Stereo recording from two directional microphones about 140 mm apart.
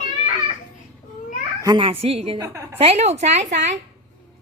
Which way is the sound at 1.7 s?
40° right (ahead or behind).